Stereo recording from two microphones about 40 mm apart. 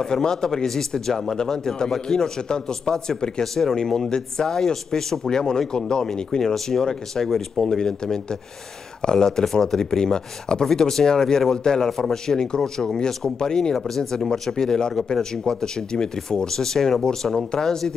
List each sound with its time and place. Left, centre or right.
0.0 s speech: centre